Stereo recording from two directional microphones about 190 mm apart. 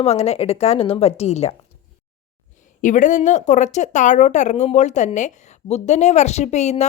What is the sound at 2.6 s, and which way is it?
A woman's voice, 40° left (ahead or behind).